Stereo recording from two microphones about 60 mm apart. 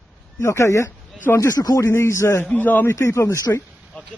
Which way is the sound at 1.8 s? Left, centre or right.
Left.